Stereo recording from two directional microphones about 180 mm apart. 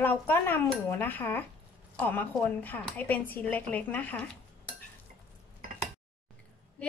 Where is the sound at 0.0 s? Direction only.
10° left (ahead or behind).